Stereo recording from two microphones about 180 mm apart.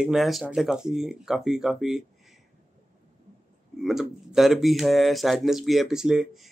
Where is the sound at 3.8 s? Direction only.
Centre (ahead or behind).